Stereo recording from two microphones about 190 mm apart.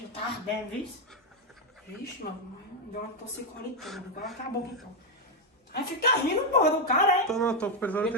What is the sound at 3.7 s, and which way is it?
Speech, centre (ahead or behind).